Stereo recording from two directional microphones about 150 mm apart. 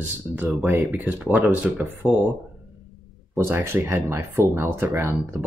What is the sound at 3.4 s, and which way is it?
Speech, 15° right (ahead or behind).